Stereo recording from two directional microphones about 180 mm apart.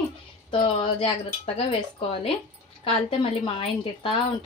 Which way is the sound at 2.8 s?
30° left (ahead or behind).